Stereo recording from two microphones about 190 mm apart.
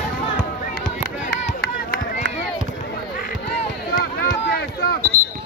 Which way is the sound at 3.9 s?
55° left (ahead or behind).